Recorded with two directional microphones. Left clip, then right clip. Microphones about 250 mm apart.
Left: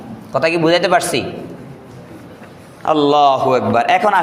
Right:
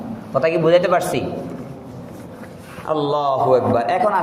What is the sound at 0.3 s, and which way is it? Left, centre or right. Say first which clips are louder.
Speech: left 1 dB; left.